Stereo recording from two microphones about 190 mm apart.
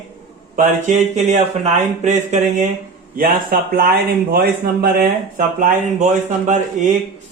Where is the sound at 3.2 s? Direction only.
50° right (ahead or behind).